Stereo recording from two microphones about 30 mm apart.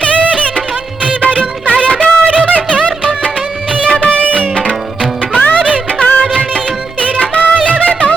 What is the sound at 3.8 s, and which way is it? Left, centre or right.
Music, left.